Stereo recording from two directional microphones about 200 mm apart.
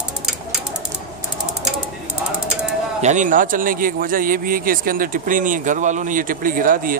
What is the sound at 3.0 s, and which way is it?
A man's voice, 35° right (ahead or behind).